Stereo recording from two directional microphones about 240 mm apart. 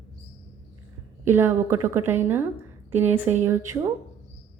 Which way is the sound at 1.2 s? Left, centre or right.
Centre.